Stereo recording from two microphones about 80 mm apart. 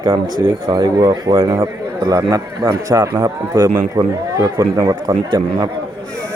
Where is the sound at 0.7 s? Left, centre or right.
Right.